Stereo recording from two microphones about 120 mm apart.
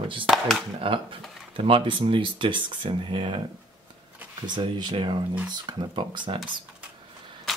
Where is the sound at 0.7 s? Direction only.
45° right (ahead or behind).